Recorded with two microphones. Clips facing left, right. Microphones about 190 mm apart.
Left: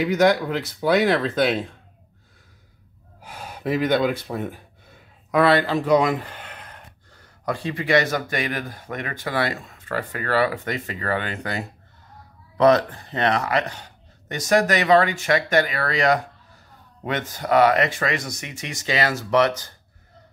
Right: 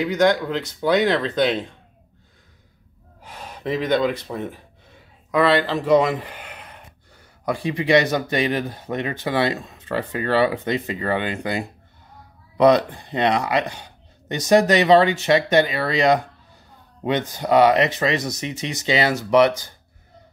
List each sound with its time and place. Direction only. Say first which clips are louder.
0.0 s speech: even; 5° left (ahead or behind)
3.2 s speech: left 1 dB; 5° left (ahead or behind); by 19.7 s 15° right (ahead or behind)